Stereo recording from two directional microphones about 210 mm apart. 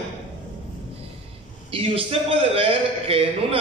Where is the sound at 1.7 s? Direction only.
25° right (ahead or behind).